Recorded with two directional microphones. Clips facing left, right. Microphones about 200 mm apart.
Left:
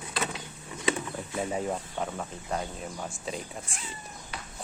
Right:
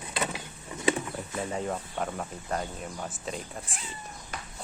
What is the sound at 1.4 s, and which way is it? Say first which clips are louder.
Speech: left 2 dB; 10° left (ahead or behind).